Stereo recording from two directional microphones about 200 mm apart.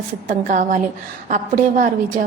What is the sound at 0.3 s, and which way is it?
A woman's voice, 40° right (ahead or behind).